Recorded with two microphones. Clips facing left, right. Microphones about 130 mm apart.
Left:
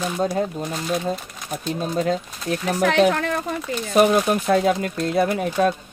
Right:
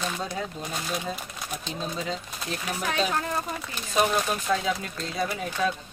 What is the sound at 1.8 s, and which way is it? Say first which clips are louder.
Speech: left 10 dB; 55° left (ahead or behind).